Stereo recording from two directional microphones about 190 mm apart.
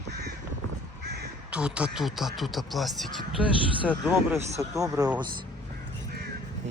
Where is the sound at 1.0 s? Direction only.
60° right (ahead or behind).